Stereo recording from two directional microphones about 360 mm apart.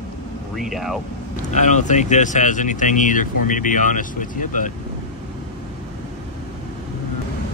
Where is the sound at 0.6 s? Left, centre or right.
Centre.